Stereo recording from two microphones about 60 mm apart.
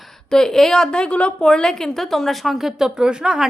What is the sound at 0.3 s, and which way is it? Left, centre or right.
A woman's voice, centre.